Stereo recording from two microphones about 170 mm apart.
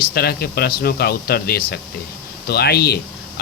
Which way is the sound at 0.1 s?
70° left (ahead or behind).